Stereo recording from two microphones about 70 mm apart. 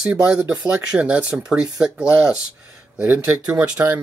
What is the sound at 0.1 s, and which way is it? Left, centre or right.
Speech, right.